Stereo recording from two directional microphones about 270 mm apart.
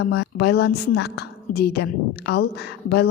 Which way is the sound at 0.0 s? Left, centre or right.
Left.